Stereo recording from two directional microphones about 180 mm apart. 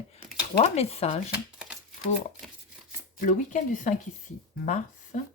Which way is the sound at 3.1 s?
45° left (ahead or behind).